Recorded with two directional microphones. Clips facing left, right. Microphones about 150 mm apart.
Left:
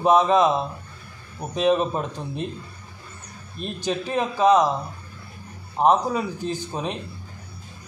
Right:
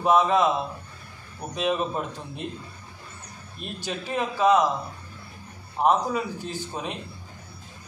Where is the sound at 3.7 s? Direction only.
20° left (ahead or behind).